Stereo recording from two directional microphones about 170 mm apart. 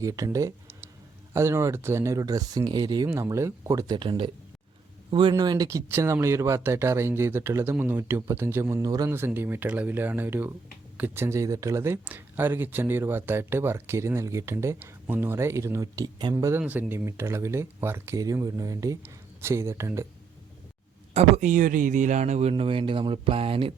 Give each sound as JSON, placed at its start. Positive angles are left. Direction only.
{"t": 0.0, "sound": "speech", "side_deg": -20}
{"t": 21.1, "sound": "speech", "side_deg": -40}